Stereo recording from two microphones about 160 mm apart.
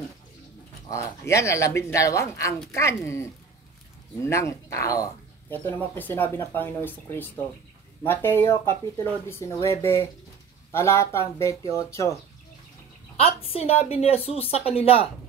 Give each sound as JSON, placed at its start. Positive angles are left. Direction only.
{"t": 0.8, "sound": "speech", "side_deg": 20}
{"t": 13.2, "sound": "a woman's voice", "side_deg": 40}